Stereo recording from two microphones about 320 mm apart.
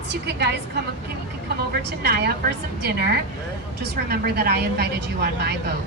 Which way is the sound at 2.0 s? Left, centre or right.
Right.